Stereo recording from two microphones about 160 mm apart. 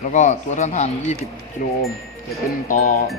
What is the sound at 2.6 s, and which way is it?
Speech, 55° left (ahead or behind).